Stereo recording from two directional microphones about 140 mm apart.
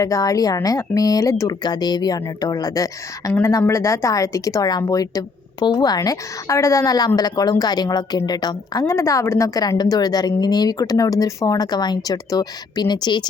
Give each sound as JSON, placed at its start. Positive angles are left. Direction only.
{"t": 0.0, "sound": "a woman's voice", "side_deg": 25}